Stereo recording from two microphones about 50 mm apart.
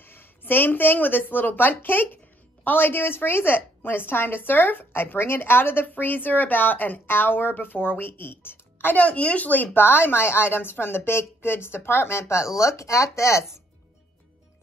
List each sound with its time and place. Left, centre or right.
0.0 s a woman's voice: left
8.9 s a woman's voice: left